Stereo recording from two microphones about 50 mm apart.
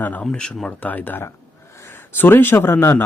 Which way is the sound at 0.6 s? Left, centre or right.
Left.